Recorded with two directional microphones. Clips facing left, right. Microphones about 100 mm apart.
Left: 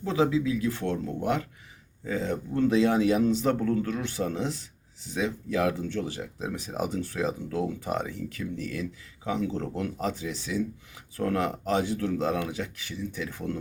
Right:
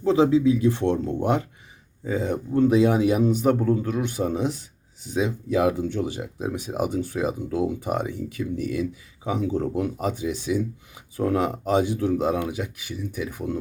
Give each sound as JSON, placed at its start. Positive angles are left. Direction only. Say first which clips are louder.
{"t": 0.0, "sound": "speech", "louder": "right 7 dB", "side_deg": -30}